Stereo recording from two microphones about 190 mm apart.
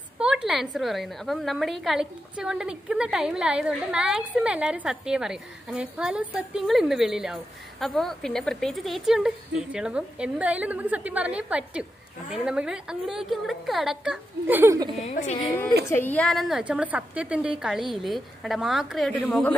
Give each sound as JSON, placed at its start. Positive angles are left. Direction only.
{"t": 0.2, "sound": "a woman's voice", "side_deg": -5}
{"t": 15.0, "sound": "a woman's voice", "side_deg": 35}
{"t": 15.9, "sound": "a woman's voice", "side_deg": 10}